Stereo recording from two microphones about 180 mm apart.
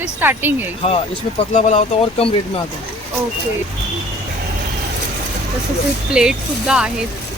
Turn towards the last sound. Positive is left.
turn(degrees=-5)  # may be behind; listen again after turning